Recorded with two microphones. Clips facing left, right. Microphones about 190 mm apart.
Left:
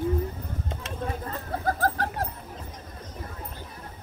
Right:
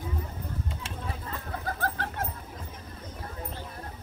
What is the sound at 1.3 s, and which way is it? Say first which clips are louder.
Bird: left 6 dB; 40° left (ahead or behind).